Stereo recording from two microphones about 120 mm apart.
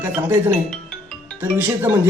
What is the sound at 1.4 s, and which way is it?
Speech, 20° right (ahead or behind).